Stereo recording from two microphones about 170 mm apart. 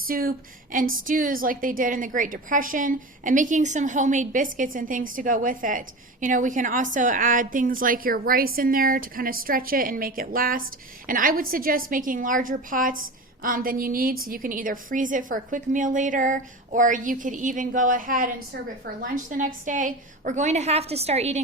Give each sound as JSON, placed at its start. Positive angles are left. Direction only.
{"t": 0.1, "sound": "a woman's voice", "side_deg": -60}